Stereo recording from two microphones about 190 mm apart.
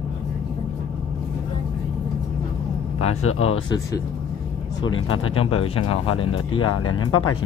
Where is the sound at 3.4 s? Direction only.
30° left (ahead or behind).